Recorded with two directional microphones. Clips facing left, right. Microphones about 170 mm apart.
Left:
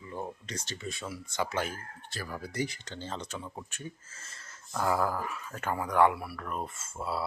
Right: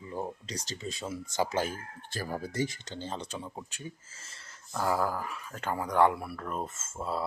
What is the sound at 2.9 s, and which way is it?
Speech, 15° right (ahead or behind).